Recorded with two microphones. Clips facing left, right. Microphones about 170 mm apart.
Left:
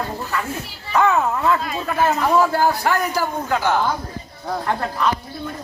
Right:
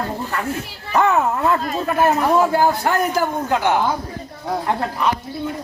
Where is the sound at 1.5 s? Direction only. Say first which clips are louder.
Right 2 dB; 45° right (ahead or behind).